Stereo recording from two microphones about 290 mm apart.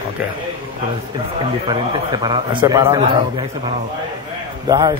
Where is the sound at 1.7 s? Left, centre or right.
Centre.